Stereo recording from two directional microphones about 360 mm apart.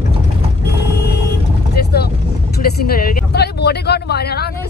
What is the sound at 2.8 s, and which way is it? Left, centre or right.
Speech, left.